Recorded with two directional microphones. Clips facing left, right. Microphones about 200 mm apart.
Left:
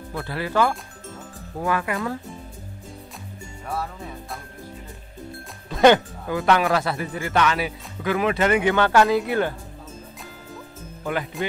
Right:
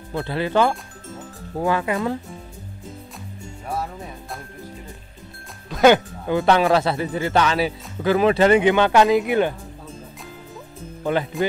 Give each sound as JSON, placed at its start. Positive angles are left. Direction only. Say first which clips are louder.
{"t": 0.1, "sound": "speech", "louder": "right 4 dB", "side_deg": -25}
{"t": 5.7, "sound": "music", "louder": "right 1 dB", "side_deg": -5}
{"t": 6.2, "sound": "speech", "louder": "right 4 dB", "side_deg": -25}
{"t": 11.4, "sound": "speech", "louder": "right 6 dB", "side_deg": 0}